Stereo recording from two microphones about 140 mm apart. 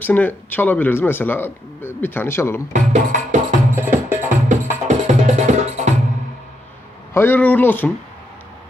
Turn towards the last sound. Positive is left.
turn(degrees=15)  # may be behind; listen again after turning